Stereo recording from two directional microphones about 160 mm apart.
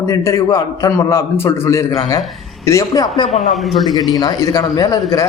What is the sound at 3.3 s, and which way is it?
Speech, centre (ahead or behind).